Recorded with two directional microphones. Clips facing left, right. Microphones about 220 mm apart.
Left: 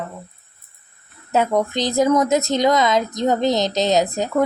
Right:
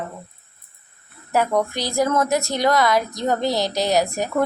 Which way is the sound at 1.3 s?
20° left (ahead or behind).